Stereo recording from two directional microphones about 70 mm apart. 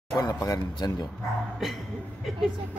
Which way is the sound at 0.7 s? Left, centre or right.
Left.